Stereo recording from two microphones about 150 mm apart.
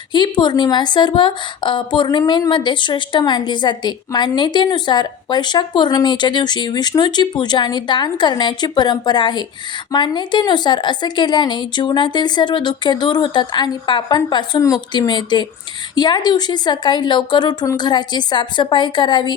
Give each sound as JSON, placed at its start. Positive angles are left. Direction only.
{"t": 0.1, "sound": "a woman's voice", "side_deg": 30}